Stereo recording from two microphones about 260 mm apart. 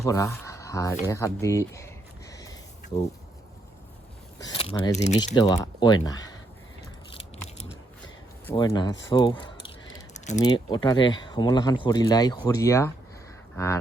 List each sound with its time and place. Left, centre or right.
0.0 s speech: centre
0.4 s a sound: centre
1.0 s speech: centre
2.3 s a sound: centre
4.4 s speech: centre
5.0 s speech: left
5.4 s speech: centre
8.4 s speech: centre
10.2 s keys jangling: left
10.4 s speech: centre